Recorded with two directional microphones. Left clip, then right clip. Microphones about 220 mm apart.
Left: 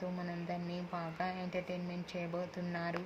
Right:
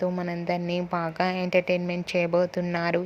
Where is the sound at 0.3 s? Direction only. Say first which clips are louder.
Right 14 dB; 40° right (ahead or behind).